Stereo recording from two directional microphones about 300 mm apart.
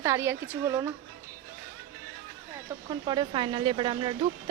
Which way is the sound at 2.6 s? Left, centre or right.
Centre.